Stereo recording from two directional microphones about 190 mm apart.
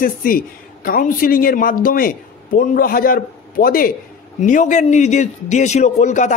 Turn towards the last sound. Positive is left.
turn(degrees=40)  # may be behind; listen again after turning